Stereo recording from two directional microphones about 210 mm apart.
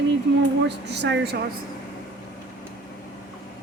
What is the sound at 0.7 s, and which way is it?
Speech, 55° right (ahead or behind).